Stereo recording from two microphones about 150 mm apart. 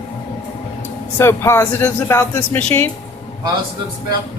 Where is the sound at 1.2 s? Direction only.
15° left (ahead or behind).